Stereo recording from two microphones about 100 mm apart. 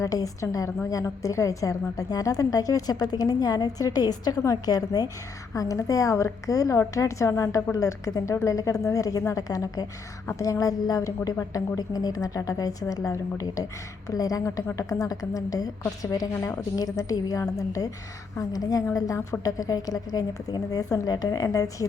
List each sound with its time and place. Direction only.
0.0 s a woman's voice: 35° left (ahead or behind)
16.3 s a woman's voice: 25° left (ahead or behind)
16.7 s a woman's voice: 35° left (ahead or behind)